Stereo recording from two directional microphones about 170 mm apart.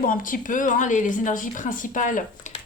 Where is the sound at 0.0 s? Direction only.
50° left (ahead or behind).